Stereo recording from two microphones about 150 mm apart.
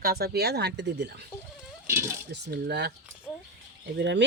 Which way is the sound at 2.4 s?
90° right.